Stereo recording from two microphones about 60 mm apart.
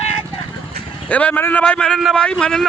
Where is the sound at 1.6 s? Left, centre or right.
Centre.